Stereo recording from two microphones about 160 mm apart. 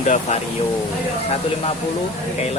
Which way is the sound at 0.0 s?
45° left (ahead or behind).